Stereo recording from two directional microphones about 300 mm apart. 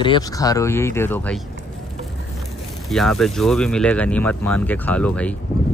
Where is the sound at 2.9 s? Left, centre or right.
Centre.